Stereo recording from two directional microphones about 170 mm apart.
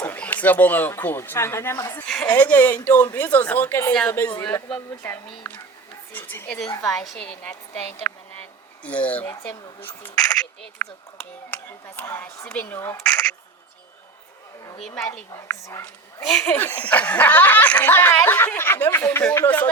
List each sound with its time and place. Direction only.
0.0 s speech: 10° left (ahead or behind)
2.0 s speech: 5° left (ahead or behind)
6.1 s a woman's voice: 10° left (ahead or behind)
7.0 s speech: 5° left (ahead or behind)
14.8 s speech: 5° left (ahead or behind)
15.4 s speech: 15° left (ahead or behind)